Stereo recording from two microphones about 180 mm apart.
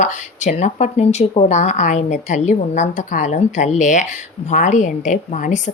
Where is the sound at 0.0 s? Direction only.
40° left (ahead or behind).